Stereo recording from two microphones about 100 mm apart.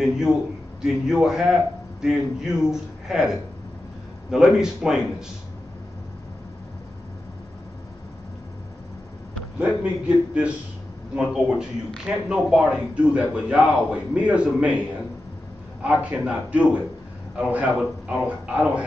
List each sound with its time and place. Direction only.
0.8 s a man's voice: 5° right (ahead or behind)
9.6 s a man's voice: 10° right (ahead or behind)
15.8 s a man's voice: 15° right (ahead or behind)